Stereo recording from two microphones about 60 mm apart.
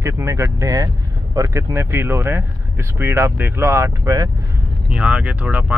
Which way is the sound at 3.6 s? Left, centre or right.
Right.